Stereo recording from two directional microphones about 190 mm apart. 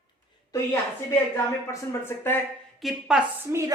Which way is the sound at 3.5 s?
15° right (ahead or behind).